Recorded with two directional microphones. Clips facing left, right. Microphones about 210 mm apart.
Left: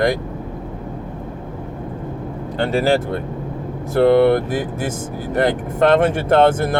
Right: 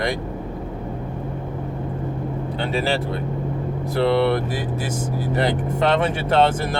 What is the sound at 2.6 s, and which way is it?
Speech, 45° left (ahead or behind).